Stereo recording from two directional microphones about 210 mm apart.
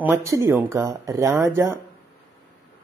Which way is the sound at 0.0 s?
15° right (ahead or behind).